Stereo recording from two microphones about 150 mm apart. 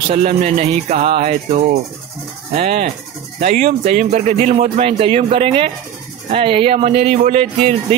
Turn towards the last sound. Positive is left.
turn(degrees=-50)  # may be behind; listen again after turning